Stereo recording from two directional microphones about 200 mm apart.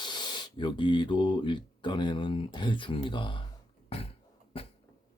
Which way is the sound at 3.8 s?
30° left (ahead or behind).